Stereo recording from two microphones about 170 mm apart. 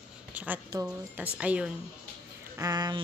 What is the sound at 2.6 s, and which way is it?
Speech, 25° right (ahead or behind).